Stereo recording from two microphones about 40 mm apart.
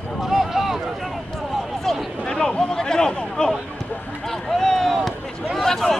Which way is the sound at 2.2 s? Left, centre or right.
Centre.